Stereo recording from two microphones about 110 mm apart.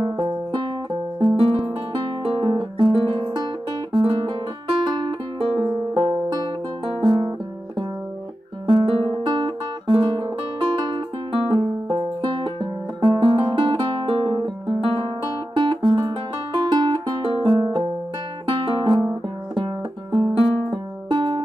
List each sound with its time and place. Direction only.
0.0 s music: 45° right (ahead or behind)
7.0 s guitar: 45° right (ahead or behind)
8.6 s music: 45° right (ahead or behind)
20.7 s music: 45° right (ahead or behind)